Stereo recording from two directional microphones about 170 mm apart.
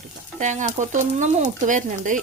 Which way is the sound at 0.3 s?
45° right (ahead or behind).